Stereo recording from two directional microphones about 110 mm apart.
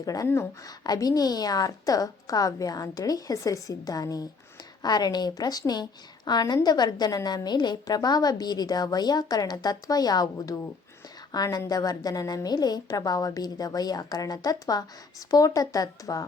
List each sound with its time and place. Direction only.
0.0 s a woman's voice: 35° left (ahead or behind)